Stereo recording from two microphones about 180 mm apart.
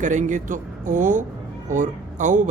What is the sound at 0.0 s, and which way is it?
Speech, 45° right (ahead or behind).